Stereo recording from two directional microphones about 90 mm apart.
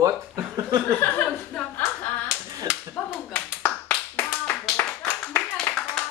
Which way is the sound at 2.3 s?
10° right (ahead or behind).